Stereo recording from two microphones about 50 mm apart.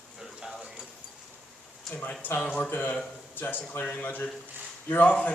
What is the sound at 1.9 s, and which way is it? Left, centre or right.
Speech, left.